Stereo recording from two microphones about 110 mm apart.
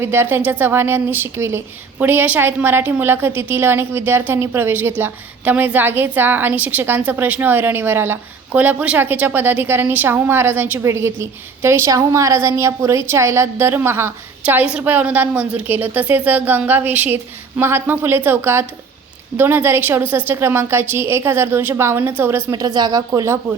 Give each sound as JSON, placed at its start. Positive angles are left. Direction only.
{"t": 0.0, "sound": "a woman's voice", "side_deg": -20}
{"t": 22.5, "sound": "speech", "side_deg": -35}